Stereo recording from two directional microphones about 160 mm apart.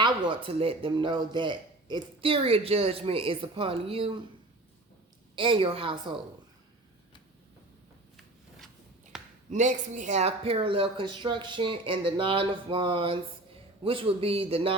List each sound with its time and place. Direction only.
0.0 s speech: 30° right (ahead or behind)
5.4 s speech: 35° right (ahead or behind)
8.1 s a sound: centre (ahead or behind)
9.5 s speech: 50° right (ahead or behind); by 14.8 s 35° right (ahead or behind)